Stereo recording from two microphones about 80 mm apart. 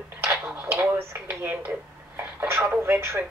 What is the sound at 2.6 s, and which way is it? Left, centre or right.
Speech, right.